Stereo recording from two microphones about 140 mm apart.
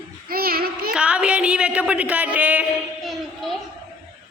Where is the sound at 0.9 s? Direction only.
5° right (ahead or behind).